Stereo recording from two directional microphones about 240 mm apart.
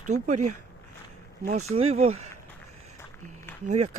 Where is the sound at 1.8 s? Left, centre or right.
Right.